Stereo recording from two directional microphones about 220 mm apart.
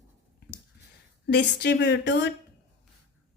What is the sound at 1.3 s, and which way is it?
A woman's voice, 50° left (ahead or behind).